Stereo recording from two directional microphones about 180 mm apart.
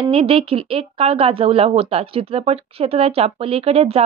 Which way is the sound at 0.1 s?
35° right (ahead or behind).